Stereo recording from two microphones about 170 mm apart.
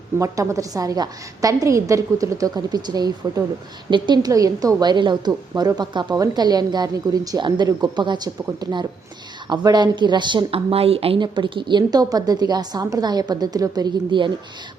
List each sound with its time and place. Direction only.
0.2 s speech: 20° right (ahead or behind)